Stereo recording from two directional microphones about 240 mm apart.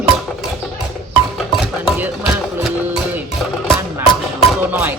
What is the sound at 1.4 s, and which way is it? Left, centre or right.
Music, centre.